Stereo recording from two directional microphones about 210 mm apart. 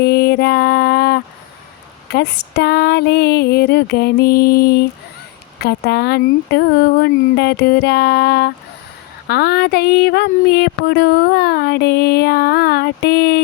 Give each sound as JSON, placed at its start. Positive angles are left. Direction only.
{"t": 0.0, "sound": "mantra", "side_deg": 50}
{"t": 2.1, "sound": "speech", "side_deg": 50}